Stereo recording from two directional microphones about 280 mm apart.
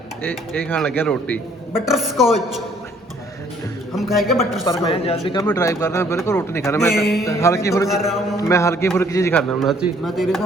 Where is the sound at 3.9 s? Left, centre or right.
Centre.